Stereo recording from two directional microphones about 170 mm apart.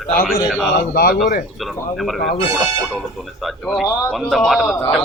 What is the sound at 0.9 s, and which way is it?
Speech, 65° left (ahead or behind).